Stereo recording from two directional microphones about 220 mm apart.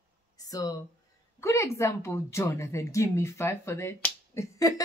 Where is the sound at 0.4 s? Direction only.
15° left (ahead or behind).